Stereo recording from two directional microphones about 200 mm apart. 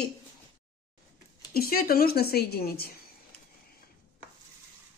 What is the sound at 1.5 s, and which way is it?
A woman's voice, 50° left (ahead or behind).